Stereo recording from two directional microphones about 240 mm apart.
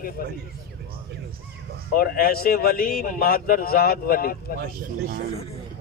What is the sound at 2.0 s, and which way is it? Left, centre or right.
A man's voice, left.